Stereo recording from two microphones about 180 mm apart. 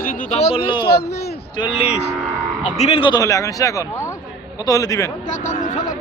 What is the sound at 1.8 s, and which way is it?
Speech, 35° left (ahead or behind).